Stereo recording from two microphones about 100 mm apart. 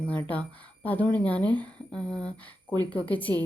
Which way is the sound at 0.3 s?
15° left (ahead or behind).